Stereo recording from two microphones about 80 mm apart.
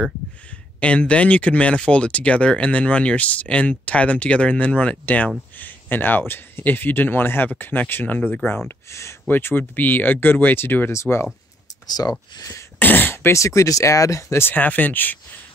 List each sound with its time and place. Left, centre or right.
0.7 s speech: centre
8.6 s speech: left
9.3 s speech: left
11.9 s speech: left
12.7 s speech: left
14.4 s speech: left